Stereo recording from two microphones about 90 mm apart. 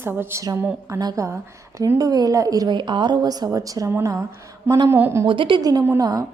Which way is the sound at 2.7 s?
60° right (ahead or behind).